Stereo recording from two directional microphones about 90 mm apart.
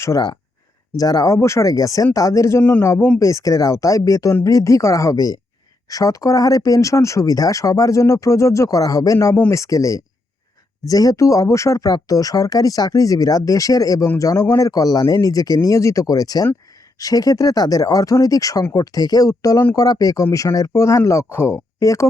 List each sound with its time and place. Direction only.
0.9 s speech: 40° left (ahead or behind)